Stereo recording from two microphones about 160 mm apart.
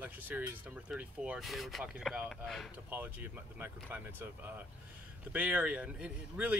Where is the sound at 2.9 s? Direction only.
10° right (ahead or behind).